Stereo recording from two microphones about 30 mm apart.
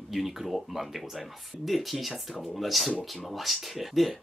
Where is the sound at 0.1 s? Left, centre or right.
Centre.